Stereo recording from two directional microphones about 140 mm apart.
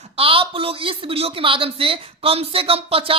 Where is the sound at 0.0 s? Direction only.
40° right (ahead or behind).